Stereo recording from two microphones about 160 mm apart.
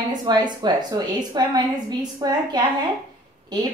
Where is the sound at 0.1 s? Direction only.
25° right (ahead or behind).